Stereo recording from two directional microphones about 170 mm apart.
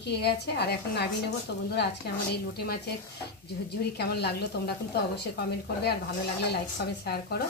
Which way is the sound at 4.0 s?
75° left (ahead or behind).